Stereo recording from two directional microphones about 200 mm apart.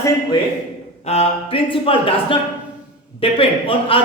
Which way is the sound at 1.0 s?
30° left (ahead or behind).